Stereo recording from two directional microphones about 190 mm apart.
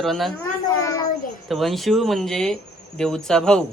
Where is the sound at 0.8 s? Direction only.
15° left (ahead or behind).